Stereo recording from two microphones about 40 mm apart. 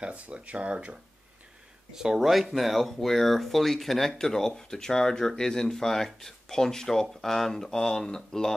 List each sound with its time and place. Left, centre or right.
0.0 s speech: right
1.9 s speech: centre